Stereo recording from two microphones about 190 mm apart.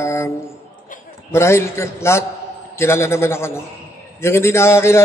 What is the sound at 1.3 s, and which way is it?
A man's voice, 15° left (ahead or behind).